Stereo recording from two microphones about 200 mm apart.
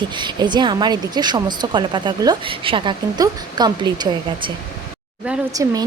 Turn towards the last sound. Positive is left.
turn(degrees=-15)  # may be behind; listen again after turning